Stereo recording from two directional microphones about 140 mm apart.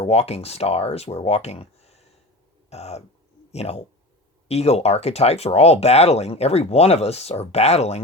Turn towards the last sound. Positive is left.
turn(degrees=50)  # may be behind; listen again after turning